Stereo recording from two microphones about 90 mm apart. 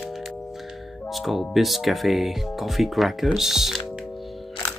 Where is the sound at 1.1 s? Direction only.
Centre (ahead or behind).